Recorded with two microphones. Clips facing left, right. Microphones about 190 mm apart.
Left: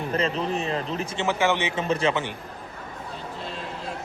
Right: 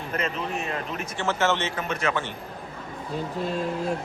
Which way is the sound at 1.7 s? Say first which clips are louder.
Left 4 dB; 30° left (ahead or behind).